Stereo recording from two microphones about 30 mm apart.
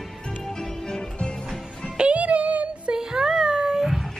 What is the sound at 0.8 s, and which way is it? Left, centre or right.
Music, left.